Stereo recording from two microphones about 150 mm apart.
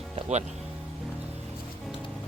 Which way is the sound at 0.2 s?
50° right (ahead or behind).